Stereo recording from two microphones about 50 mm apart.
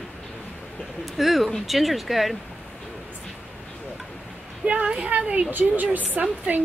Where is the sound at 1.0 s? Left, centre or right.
Centre.